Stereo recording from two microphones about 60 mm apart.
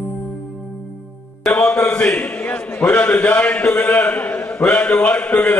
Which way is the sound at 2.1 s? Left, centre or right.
Left.